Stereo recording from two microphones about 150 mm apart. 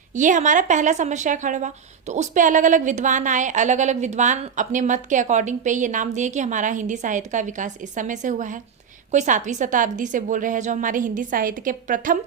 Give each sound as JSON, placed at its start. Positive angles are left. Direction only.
{"t": 0.2, "sound": "a woman's voice", "side_deg": -55}